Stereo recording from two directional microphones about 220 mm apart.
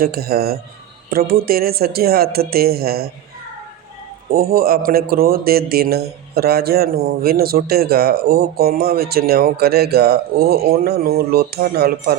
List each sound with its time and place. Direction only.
0.0 s speech: 45° right (ahead or behind)
4.3 s speech: 40° right (ahead or behind)